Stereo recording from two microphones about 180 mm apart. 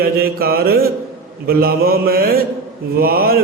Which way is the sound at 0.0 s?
55° right (ahead or behind).